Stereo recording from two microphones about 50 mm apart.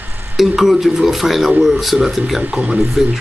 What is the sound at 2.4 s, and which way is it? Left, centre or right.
Speech, right.